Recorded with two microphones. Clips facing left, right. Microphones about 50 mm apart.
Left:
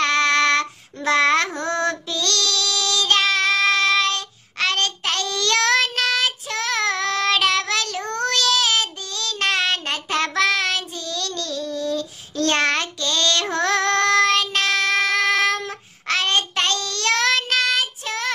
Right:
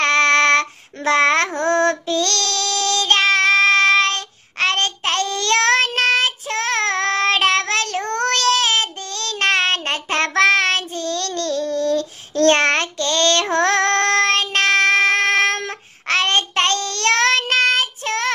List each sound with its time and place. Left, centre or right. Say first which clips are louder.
0.0 s child singing: right 3 dB; right